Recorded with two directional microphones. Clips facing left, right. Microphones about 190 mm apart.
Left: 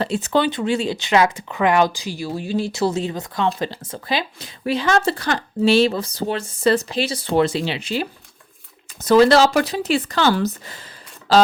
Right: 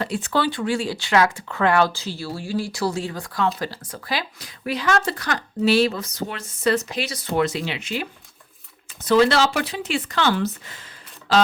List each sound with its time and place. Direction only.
0.0 s speech: 25° left (ahead or behind)